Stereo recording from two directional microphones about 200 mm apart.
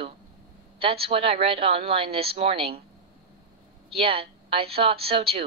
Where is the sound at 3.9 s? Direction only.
30° right (ahead or behind).